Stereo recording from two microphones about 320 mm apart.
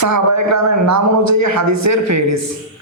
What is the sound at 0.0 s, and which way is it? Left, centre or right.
A man's voice, right.